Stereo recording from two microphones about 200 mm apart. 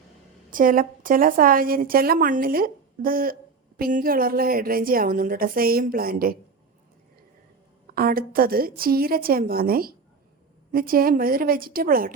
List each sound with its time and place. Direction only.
0.5 s a woman's voice: 45° right (ahead or behind)
7.9 s a woman's voice: 45° right (ahead or behind)